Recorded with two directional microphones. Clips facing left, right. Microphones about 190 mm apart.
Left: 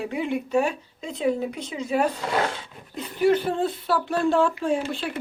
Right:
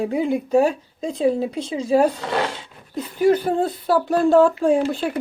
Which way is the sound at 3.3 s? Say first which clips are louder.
Right 3 dB; 40° right (ahead or behind).